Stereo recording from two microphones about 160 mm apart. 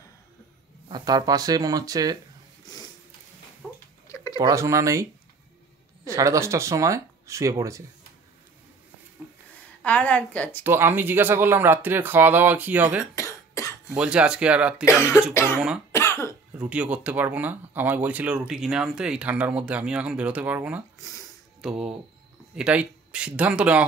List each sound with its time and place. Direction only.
0.8 s speech: 25° right (ahead or behind)
3.6 s a sound: 10° left (ahead or behind)
4.1 s a sound: 20° left (ahead or behind)
4.4 s speech: 20° right (ahead or behind)
6.0 s speech: 20° right (ahead or behind)
9.8 s a woman's voice: 10° left (ahead or behind)
10.6 s speech: 15° right (ahead or behind)
13.1 s cough: 20° left (ahead or behind)
13.8 s speech: 5° right (ahead or behind)
15.9 s cough: 15° left (ahead or behind)
16.5 s speech: 10° right (ahead or behind)